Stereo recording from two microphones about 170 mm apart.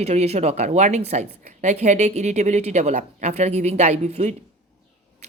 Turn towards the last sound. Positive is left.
turn(degrees=-40)  # may be behind; listen again after turning